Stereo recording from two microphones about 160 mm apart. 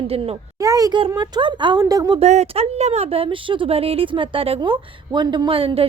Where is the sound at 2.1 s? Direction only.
45° right (ahead or behind).